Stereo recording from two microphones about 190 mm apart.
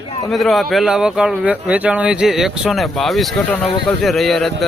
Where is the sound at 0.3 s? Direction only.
Centre (ahead or behind).